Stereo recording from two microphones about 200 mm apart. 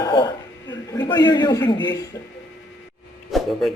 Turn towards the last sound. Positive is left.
turn(degrees=0)  # may be behind; listen again after turning